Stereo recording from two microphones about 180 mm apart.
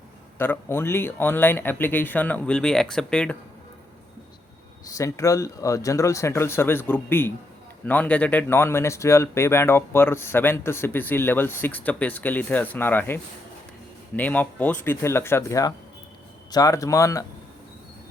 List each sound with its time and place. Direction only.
0.3 s speech: 10° left (ahead or behind)
4.9 s speech: 20° left (ahead or behind)
14.2 s speech: 10° left (ahead or behind)